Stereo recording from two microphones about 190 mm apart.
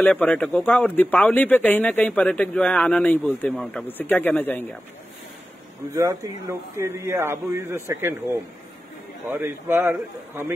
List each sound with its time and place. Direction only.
0.0 s speech: 5° left (ahead or behind)
6.2 s speech: 15° right (ahead or behind)
9.3 s speech: 10° right (ahead or behind)